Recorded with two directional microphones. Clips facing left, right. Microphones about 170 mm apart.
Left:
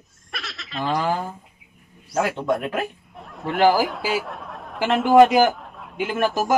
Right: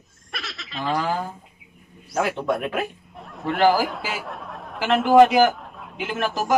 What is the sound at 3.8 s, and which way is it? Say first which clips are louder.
Speech: left 4 dB; 5° left (ahead or behind).